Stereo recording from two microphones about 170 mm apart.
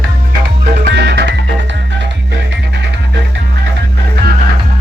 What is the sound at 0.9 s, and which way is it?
Music, 75° right (ahead or behind).